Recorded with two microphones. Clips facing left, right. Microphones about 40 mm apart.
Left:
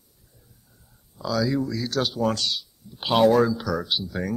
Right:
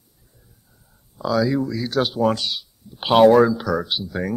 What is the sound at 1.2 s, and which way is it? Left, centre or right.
Speech, centre.